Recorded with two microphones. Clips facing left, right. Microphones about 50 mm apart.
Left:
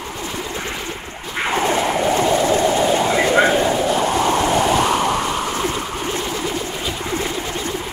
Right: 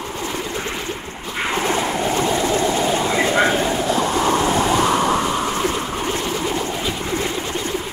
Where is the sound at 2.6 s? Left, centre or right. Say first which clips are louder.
Left 2 dB; centre.